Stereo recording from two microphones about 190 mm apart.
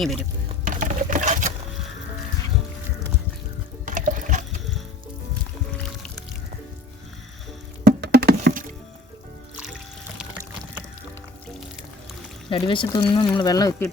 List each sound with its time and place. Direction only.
0.6 s sewing machine: 45° right (ahead or behind)
3.8 s liquid: 40° right (ahead or behind)
7.9 s a sound: 60° right (ahead or behind)
12.5 s speech: 25° left (ahead or behind)